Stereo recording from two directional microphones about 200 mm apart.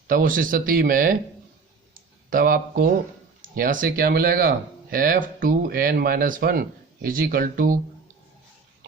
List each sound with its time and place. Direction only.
0.1 s speech: 45° right (ahead or behind)
1.9 s a sound: 45° right (ahead or behind)
3.5 s speech: 45° right (ahead or behind)